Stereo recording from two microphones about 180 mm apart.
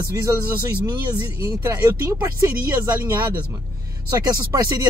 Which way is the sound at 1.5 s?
15° right (ahead or behind).